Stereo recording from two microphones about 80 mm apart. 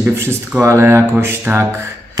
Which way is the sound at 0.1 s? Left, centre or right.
Right.